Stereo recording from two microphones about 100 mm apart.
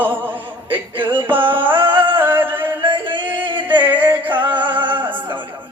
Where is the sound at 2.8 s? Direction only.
55° right (ahead or behind).